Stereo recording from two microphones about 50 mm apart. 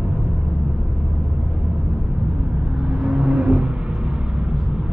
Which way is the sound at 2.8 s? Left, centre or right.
Centre.